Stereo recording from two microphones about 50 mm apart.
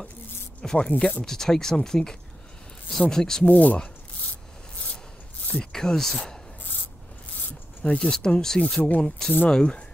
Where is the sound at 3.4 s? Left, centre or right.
Left.